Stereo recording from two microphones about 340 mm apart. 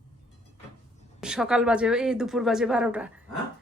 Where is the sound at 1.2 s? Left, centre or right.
Centre.